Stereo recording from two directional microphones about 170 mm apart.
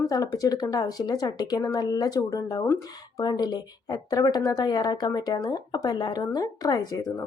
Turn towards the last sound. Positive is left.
turn(degrees=20)  # may be behind; listen again after turning